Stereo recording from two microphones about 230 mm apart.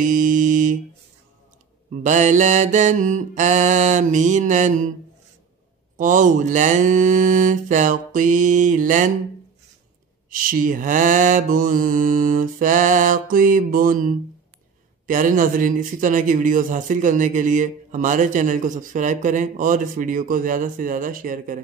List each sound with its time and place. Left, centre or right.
0.0 s mantra: right
2.0 s a man's voice: right
5.9 s a man's voice: right
10.3 s a man's voice: right